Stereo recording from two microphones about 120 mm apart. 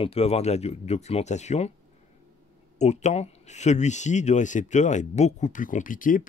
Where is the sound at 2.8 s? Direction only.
75° left (ahead or behind); by 6.2 s 90° left.